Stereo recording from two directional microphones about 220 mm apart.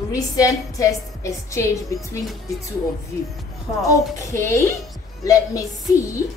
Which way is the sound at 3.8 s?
15° left (ahead or behind).